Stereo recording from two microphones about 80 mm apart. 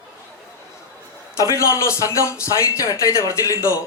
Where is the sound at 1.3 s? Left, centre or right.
Left.